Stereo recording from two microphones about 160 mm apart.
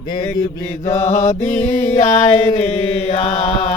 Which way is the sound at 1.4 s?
50° left (ahead or behind).